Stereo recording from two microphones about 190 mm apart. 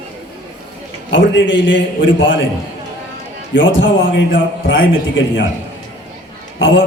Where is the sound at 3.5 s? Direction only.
70° left (ahead or behind).